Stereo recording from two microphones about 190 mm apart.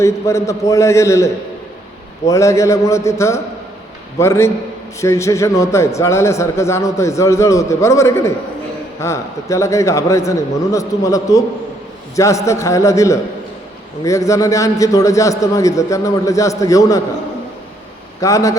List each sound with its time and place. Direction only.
0.0 s a man's voice: 15° left (ahead or behind)
18.2 s a man's voice: 15° left (ahead or behind)